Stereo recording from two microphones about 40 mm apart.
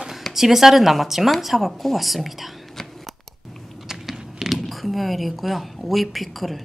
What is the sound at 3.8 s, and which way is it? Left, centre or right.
Speech, centre.